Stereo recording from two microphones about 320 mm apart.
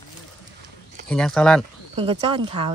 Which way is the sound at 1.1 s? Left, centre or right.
Centre.